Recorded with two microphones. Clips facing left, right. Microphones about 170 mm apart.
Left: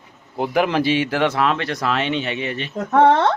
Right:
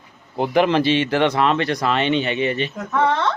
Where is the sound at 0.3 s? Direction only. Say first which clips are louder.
Right 2 dB; 5° left (ahead or behind).